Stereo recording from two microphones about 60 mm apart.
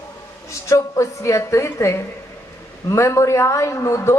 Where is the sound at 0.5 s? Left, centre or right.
Left.